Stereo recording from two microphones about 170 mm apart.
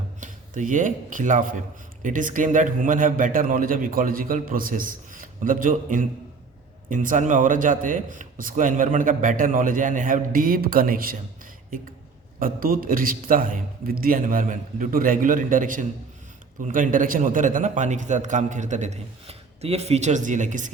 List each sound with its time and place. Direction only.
0.2 s a man's voice: 50° right (ahead or behind)
12.4 s a man's voice: 55° right (ahead or behind)